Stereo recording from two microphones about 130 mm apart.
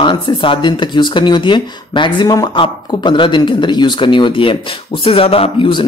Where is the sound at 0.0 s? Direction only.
40° left (ahead or behind).